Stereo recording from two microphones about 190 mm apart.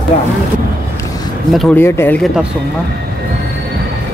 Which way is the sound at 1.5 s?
Centre (ahead or behind).